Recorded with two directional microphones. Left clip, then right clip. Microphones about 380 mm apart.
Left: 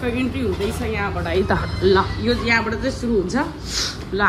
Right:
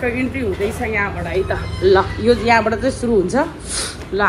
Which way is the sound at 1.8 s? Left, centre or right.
Centre.